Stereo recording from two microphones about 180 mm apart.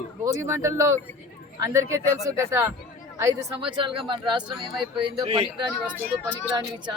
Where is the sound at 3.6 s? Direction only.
25° right (ahead or behind).